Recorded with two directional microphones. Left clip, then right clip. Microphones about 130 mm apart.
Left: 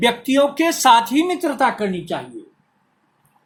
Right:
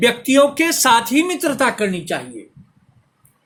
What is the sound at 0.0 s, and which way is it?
Speech, 45° right (ahead or behind).